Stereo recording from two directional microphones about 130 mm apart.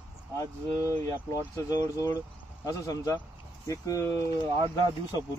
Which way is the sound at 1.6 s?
25° left (ahead or behind).